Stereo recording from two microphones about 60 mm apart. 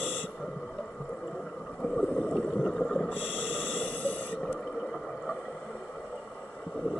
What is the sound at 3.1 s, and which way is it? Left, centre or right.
Snort, left.